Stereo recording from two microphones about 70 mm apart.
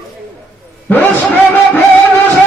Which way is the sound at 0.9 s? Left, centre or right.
Left.